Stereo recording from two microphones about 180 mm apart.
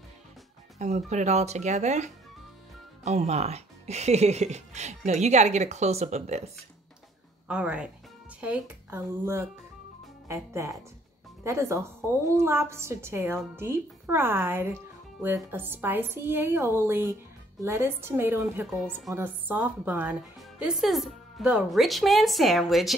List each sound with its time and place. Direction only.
0.7 s speech: 40° right (ahead or behind)
3.1 s speech: 40° right (ahead or behind)
7.4 s a woman's voice: 5° right (ahead or behind)
18.7 s speech: centre (ahead or behind)